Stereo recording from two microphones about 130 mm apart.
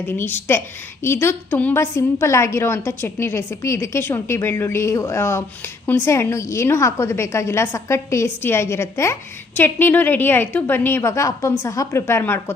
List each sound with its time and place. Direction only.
0.0 s a woman's voice: 15° left (ahead or behind)